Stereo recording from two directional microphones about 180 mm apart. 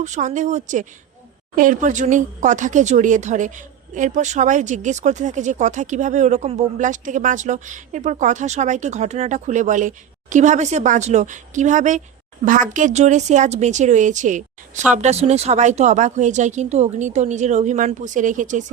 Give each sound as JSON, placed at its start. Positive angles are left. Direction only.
{"t": 0.0, "sound": "a woman's voice", "side_deg": -40}